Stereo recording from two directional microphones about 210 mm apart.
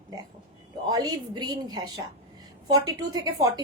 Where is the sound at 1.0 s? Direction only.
20° right (ahead or behind).